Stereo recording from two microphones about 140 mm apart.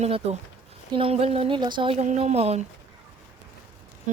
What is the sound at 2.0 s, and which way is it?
Speech, 55° right (ahead or behind).